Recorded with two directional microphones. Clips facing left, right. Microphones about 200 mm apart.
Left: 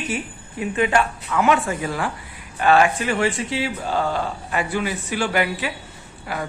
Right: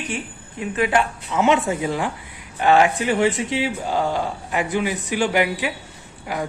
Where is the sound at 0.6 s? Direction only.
Centre (ahead or behind).